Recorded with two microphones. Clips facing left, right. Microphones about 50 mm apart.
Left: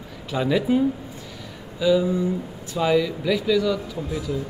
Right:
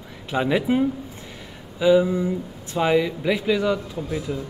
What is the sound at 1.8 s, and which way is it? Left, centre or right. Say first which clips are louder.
Speech: right 2 dB; right.